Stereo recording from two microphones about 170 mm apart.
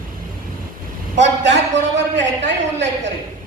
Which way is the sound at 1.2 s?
90° right.